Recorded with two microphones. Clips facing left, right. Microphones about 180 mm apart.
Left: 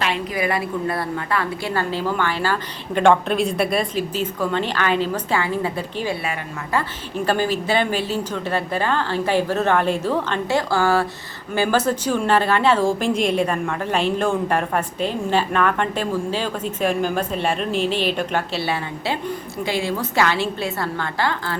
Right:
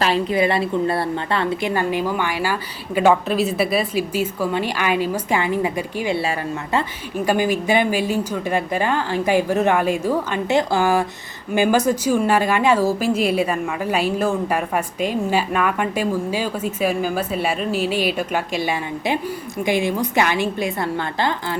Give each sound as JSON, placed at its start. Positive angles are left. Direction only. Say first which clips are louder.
{"t": 0.0, "sound": "a woman's voice", "louder": "right 5 dB", "side_deg": -30}
{"t": 7.3, "sound": "a woman's voice", "louder": "right 2 dB", "side_deg": -15}